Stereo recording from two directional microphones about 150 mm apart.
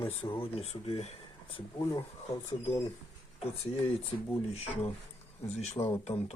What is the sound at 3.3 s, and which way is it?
Speech, 40° left (ahead or behind).